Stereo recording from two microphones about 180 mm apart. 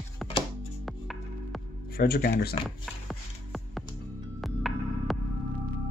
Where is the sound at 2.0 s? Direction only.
60° left (ahead or behind).